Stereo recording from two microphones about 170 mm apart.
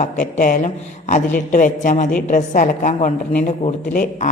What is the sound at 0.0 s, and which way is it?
A woman's voice, 50° left (ahead or behind).